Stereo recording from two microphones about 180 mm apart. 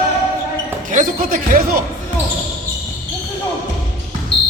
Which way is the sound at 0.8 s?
50° right (ahead or behind).